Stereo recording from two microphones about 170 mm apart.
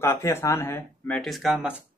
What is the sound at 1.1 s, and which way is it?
Speech, centre (ahead or behind).